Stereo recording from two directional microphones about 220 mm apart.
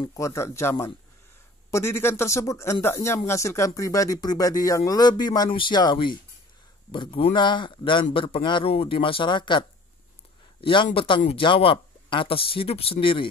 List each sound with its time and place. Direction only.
0.0 s a man's voice: 15° left (ahead or behind)